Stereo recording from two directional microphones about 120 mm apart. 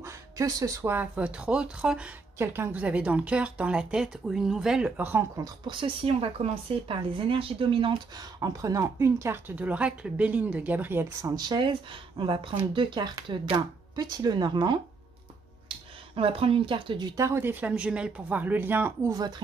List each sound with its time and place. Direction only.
0.0 s a sound: 30° right (ahead or behind)
0.9 s speech: 10° right (ahead or behind)
2.3 s speech: 20° right (ahead or behind)
5.7 s speech: 50° right (ahead or behind)
8.4 s speech: 30° right (ahead or behind)
16.2 s speech: 50° right (ahead or behind)
17.2 s speech: 20° right (ahead or behind)